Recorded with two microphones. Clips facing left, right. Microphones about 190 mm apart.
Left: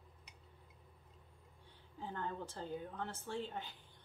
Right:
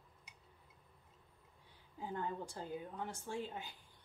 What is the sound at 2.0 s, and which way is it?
A woman's voice, 10° right (ahead or behind).